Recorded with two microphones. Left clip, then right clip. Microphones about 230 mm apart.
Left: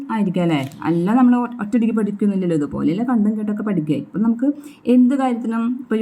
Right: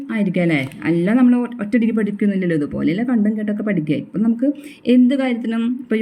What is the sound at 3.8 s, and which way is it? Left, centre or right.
Speech, centre.